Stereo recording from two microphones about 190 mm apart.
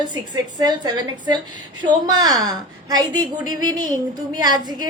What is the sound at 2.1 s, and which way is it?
A woman's voice, 20° right (ahead or behind).